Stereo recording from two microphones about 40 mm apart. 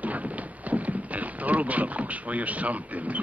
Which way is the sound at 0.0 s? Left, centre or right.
Right.